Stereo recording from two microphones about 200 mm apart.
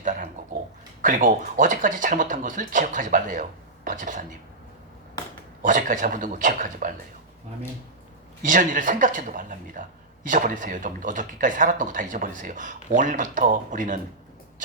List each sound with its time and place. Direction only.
0.0 s a sound: 40° right (ahead or behind)
1.0 s speech: 40° right (ahead or behind)
5.6 s speech: 40° right (ahead or behind)
8.4 s speech: 40° right (ahead or behind)